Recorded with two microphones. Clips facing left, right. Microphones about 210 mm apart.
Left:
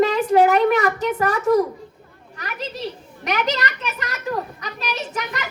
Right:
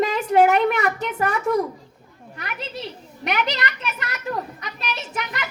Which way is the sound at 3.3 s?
40° left (ahead or behind).